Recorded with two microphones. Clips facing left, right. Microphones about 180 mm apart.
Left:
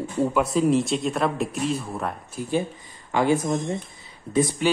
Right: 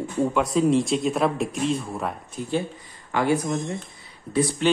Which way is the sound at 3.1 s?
20° left (ahead or behind).